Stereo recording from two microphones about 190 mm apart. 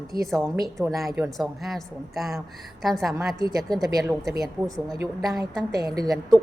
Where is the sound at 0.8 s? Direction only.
Centre (ahead or behind).